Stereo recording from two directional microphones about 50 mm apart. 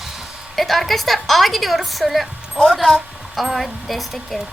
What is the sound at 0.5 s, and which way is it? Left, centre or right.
A woman's voice, centre.